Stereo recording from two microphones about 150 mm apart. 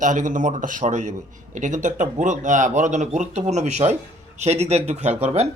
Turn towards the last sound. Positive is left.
turn(degrees=-45)  # may be behind; listen again after turning